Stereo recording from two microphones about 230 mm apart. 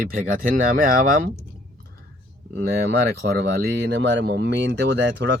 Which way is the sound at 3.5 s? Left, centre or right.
Right.